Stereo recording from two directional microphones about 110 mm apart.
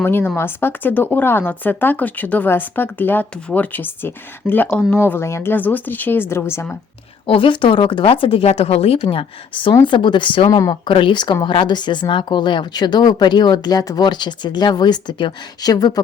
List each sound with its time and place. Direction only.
0.0 s speech: 20° left (ahead or behind)
7.3 s speech: 50° left (ahead or behind); by 9.0 s 70° left (ahead or behind)
9.0 s speech: 50° left (ahead or behind)
10.5 s speech: 35° left (ahead or behind)
10.8 s speech: 50° left (ahead or behind)